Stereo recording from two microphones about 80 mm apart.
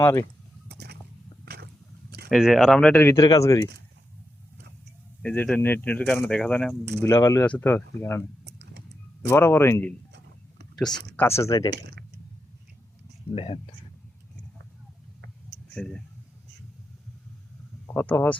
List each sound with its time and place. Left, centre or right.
0.0 s speech: left
2.3 s speech: centre
2.7 s speech: centre
3.2 s speech: left
5.2 s speech: centre
7.0 s speech: left
7.6 s speech: left
9.3 s speech: left
10.8 s speech: centre
11.2 s speech: left
15.7 s speech: centre
17.8 s speech: left